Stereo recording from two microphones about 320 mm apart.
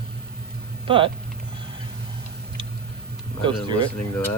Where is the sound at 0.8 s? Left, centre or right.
Centre.